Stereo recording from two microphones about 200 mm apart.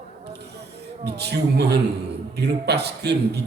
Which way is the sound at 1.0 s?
55° right (ahead or behind).